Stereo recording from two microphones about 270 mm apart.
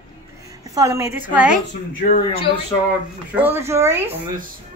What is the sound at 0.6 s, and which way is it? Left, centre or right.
A woman's voice, centre.